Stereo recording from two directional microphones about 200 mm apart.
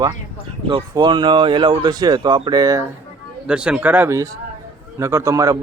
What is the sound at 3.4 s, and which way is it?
Speech, 5° right (ahead or behind).